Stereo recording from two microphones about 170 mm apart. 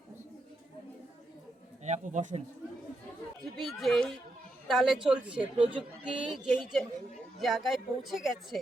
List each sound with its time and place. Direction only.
1.8 s a man's voice: 45° right (ahead or behind)
3.4 s a woman's voice: centre (ahead or behind)